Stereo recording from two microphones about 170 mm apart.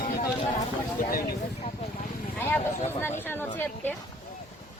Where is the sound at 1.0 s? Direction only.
55° left (ahead or behind).